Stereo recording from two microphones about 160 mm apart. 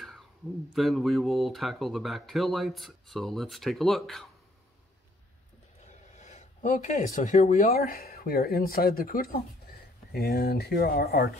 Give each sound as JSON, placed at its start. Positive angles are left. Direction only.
{"t": 0.7, "sound": "speech", "side_deg": 0}
{"t": 5.9, "sound": "a sound", "side_deg": 45}
{"t": 7.6, "sound": "speech", "side_deg": 65}